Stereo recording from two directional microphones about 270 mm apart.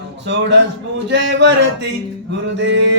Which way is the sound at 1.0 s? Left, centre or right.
Right.